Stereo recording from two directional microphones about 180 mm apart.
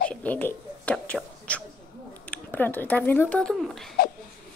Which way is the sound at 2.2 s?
10° left (ahead or behind).